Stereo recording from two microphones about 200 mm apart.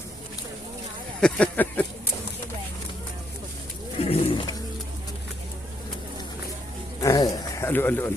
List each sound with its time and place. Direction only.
1.2 s speech: 5° left (ahead or behind)
4.0 s roaring cats: 30° left (ahead or behind)
7.0 s a sound: 15° left (ahead or behind)